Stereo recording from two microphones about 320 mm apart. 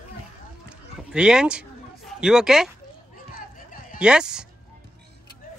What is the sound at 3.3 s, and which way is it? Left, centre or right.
Music, left.